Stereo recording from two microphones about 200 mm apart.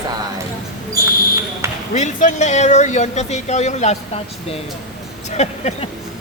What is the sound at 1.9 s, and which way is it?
Speech, 35° left (ahead or behind).